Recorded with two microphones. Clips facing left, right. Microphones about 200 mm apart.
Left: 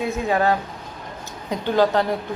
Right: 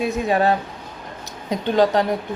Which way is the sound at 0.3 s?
25° right (ahead or behind).